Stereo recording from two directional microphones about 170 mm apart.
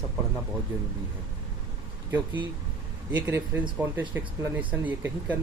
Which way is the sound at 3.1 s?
10° right (ahead or behind).